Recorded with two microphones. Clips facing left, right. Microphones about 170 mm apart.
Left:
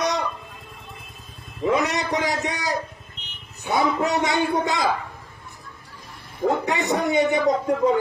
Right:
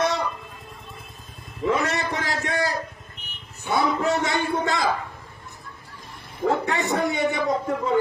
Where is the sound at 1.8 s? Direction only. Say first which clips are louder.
Left 3 dB; 15° left (ahead or behind).